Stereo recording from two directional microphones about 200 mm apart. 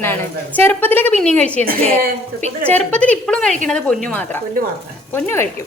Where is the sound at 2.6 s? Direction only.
5° left (ahead or behind).